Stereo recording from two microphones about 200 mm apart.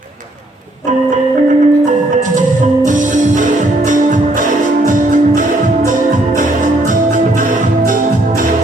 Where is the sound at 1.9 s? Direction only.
40° right (ahead or behind).